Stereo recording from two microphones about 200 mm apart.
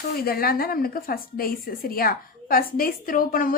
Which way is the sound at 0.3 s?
50° left (ahead or behind).